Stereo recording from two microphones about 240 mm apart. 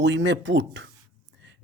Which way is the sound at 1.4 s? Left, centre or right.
Right.